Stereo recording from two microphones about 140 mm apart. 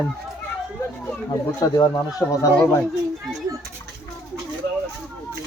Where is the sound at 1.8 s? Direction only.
25° left (ahead or behind).